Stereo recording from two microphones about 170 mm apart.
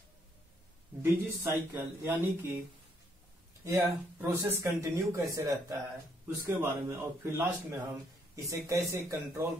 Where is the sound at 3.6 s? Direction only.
15° right (ahead or behind).